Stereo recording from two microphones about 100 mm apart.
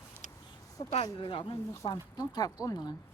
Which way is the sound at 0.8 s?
45° left (ahead or behind).